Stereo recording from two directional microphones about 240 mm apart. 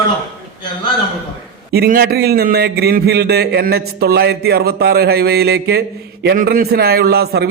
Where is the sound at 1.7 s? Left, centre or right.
Right.